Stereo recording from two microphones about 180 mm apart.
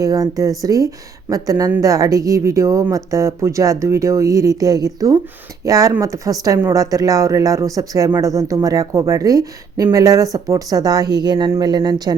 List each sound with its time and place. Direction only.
0.0 s speech: 20° right (ahead or behind)